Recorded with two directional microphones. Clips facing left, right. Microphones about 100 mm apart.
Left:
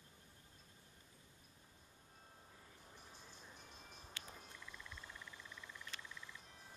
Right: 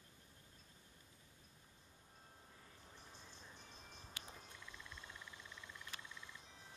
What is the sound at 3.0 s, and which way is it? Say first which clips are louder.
Music: even; 5° left (ahead or behind).